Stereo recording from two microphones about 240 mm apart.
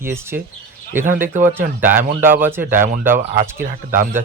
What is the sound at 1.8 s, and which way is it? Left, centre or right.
Speech, centre.